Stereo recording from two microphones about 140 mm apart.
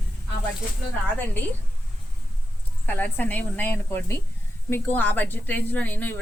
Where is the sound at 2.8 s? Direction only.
10° left (ahead or behind).